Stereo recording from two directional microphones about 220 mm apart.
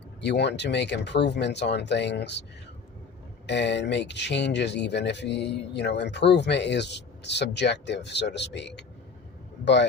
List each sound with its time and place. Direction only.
0.2 s speech: 50° left (ahead or behind)
3.4 s speech: 50° left (ahead or behind)